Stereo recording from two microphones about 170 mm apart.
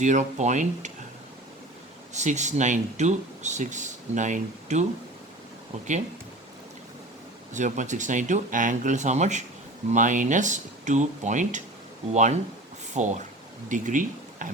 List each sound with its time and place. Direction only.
0.0 s speech: 45° right (ahead or behind)
2.1 s speech: 45° right (ahead or behind)
7.5 s speech: 45° right (ahead or behind)